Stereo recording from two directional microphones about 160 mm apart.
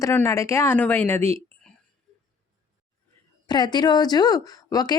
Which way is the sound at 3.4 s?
25° left (ahead or behind).